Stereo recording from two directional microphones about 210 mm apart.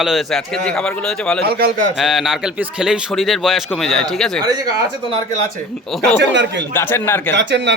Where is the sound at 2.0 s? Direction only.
Centre (ahead or behind).